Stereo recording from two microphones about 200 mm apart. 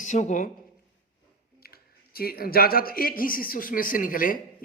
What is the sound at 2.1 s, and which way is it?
Speech, 50° left (ahead or behind).